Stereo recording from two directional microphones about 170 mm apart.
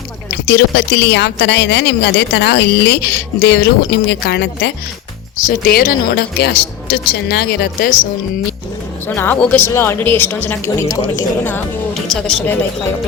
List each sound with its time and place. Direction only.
0.4 s speech: 80° left
5.5 s a woman's voice: 55° left (ahead or behind)
9.0 s speech: 10° left (ahead or behind)